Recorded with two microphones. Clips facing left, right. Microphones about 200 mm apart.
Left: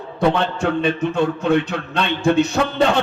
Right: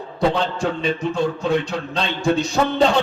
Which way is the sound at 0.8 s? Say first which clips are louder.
Left 1 dB; 60° left (ahead or behind).